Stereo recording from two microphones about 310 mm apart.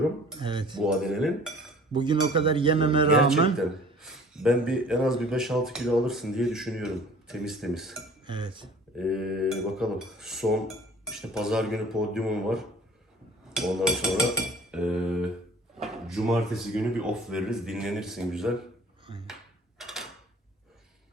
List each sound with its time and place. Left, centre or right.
0.3 s speech: centre
0.8 s speech: centre
1.9 s speech: centre
3.6 s speech: centre
8.3 s speech: centre
9.0 s speech: centre
19.8 s mechanisms: centre